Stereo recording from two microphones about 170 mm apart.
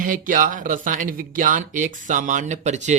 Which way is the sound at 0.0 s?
50° right (ahead or behind).